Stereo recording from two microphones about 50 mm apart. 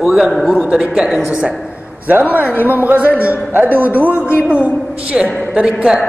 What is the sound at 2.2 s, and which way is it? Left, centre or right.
Speech, right.